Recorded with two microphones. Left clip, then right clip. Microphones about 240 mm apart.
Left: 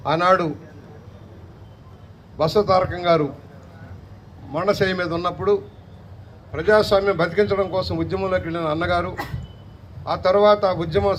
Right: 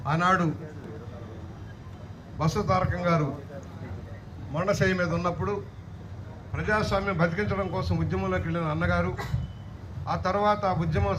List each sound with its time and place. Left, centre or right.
0.1 s a man's voice: left
2.7 s a man's voice: left
4.5 s a man's voice: left